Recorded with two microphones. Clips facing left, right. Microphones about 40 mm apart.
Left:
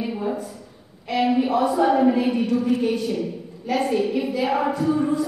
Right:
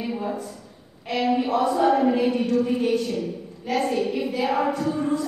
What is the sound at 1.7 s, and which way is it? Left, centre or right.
Speech, centre.